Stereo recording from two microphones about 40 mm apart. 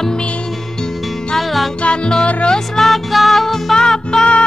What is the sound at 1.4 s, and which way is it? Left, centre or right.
Music, centre.